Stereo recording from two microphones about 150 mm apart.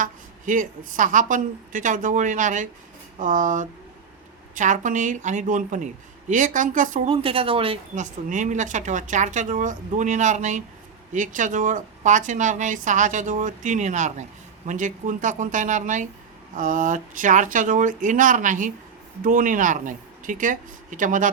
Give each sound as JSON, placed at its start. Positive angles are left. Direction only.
{"t": 0.0, "sound": "a woman's voice", "side_deg": -60}
{"t": 7.1, "sound": "speech", "side_deg": -40}
{"t": 7.9, "sound": "a woman's voice", "side_deg": -55}